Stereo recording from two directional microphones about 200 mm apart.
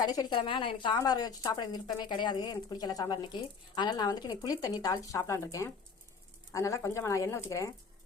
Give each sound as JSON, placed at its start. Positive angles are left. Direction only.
{"t": 0.0, "sound": "a woman's voice", "side_deg": 20}